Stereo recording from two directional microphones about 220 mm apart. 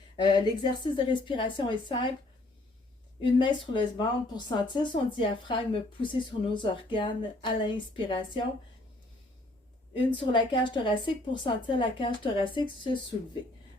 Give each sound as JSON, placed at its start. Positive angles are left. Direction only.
{"t": 0.2, "sound": "speech", "side_deg": 20}
{"t": 3.2, "sound": "speech", "side_deg": 20}
{"t": 10.1, "sound": "speech", "side_deg": 20}